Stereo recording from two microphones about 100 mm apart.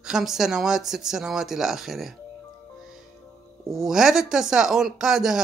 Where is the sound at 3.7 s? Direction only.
Centre (ahead or behind).